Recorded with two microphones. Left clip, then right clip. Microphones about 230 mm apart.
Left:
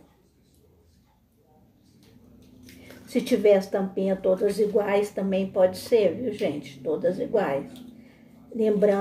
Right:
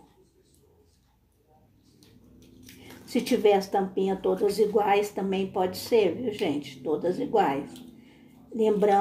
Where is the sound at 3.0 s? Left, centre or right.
Centre.